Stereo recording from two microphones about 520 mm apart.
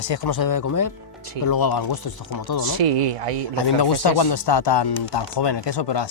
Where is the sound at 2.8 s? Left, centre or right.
Right.